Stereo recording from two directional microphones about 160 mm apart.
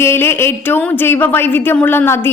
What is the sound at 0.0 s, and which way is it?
Speech, 15° left (ahead or behind).